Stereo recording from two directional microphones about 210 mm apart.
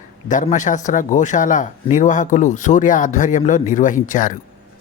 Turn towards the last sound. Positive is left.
turn(degrees=40)  # may be behind; listen again after turning